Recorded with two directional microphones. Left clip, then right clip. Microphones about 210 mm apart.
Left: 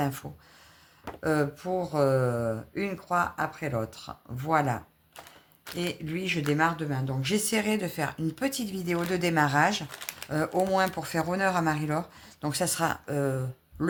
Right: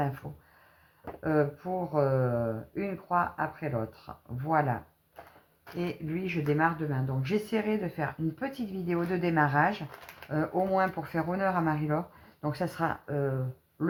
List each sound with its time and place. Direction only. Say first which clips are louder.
0.0 s speech: left 2 dB; 40° left (ahead or behind)